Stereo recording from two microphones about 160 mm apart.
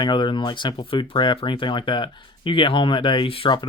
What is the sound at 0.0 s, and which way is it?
Speech, 30° left (ahead or behind).